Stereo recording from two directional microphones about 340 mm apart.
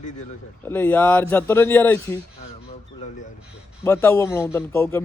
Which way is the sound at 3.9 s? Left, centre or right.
Centre.